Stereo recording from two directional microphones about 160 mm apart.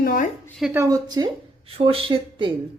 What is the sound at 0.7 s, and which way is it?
Speech, 20° right (ahead or behind).